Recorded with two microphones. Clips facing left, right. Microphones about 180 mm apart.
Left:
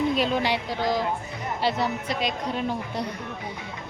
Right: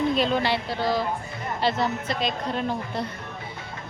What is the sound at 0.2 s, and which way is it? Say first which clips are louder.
A woman's voice: right 1 dB; 10° left (ahead or behind).